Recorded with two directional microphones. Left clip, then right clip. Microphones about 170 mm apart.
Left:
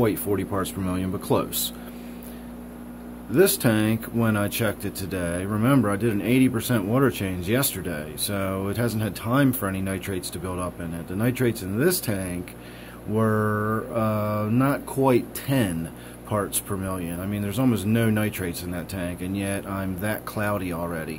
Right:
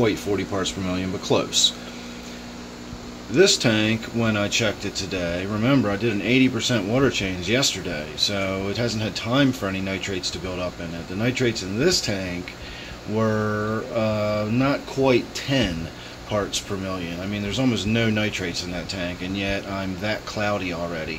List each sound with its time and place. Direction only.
0.0 s speech: 5° left (ahead or behind)
3.3 s speech: 10° left (ahead or behind)